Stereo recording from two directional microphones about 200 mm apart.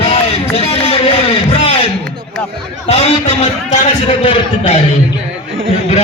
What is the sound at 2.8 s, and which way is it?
A man's voice, 30° left (ahead or behind).